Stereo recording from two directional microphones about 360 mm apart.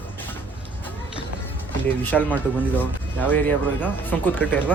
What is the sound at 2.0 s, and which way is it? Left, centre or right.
Speech, centre.